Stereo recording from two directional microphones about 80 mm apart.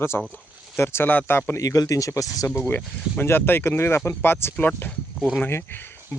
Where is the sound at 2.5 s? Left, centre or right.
Left.